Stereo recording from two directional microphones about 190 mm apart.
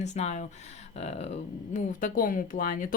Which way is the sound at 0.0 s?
35° left (ahead or behind).